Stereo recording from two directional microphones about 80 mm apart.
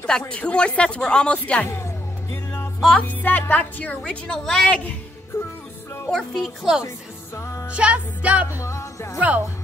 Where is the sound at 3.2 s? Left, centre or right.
Left.